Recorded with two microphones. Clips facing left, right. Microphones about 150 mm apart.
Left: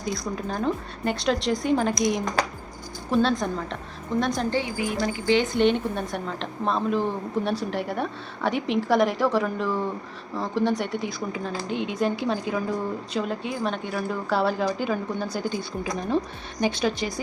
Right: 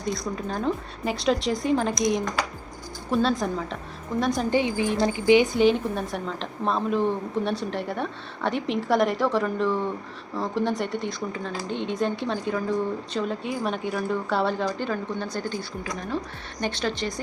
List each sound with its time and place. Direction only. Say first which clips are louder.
0.0 s a woman's voice: even; centre (ahead or behind)
4.5 s speech: right 3 dB; 20° right (ahead or behind)
5.5 s a woman's voice: right 1 dB; 5° right (ahead or behind)